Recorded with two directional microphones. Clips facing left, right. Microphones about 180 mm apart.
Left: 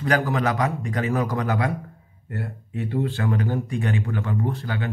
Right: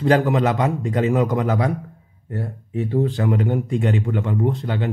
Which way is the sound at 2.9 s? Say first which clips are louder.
Right 4 dB; 15° right (ahead or behind).